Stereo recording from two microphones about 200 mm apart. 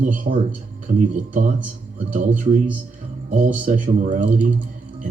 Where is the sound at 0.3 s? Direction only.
40° right (ahead or behind).